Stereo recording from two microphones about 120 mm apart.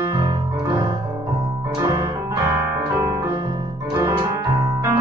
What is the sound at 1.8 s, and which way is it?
Music, 30° right (ahead or behind).